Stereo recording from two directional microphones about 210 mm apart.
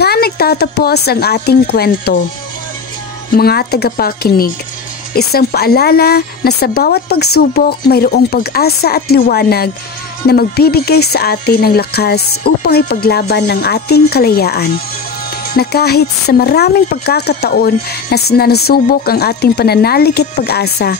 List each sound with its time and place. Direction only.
0.0 s speech: 50° left (ahead or behind)
3.3 s speech: 50° left (ahead or behind)